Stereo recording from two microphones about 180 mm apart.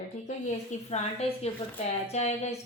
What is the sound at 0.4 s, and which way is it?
A woman's voice, 40° left (ahead or behind).